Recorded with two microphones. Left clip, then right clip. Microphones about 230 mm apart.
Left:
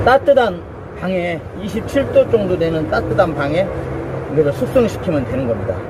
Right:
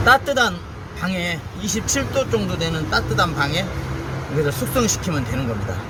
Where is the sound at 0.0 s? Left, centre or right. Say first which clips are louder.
Left 4 dB; right.